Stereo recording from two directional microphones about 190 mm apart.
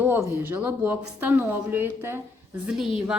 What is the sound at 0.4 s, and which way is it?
Speech, 10° right (ahead or behind).